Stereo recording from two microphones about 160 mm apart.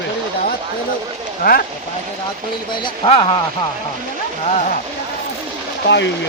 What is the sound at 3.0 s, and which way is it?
Speech, 35° left (ahead or behind).